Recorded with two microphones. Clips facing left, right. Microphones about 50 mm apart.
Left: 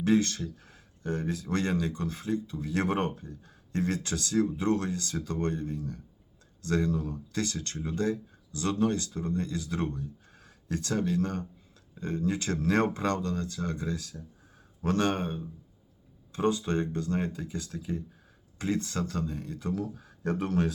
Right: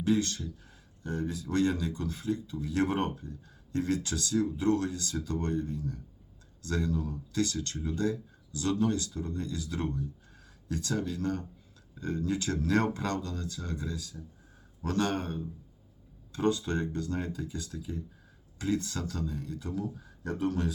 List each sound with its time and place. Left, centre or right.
0.0 s speech: left
20.0 s speech: left